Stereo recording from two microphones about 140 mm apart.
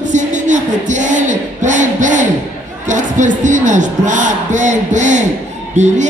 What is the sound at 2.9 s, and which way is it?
Speech, 60° right (ahead or behind).